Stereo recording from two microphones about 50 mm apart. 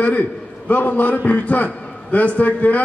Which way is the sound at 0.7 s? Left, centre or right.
Left.